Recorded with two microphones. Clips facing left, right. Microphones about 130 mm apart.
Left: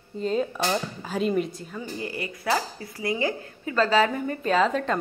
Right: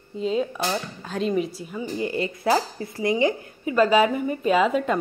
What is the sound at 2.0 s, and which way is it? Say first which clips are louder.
Speech: right 9 dB; 25° right (ahead or behind).